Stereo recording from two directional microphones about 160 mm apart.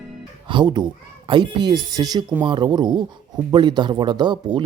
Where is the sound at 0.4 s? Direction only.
30° right (ahead or behind).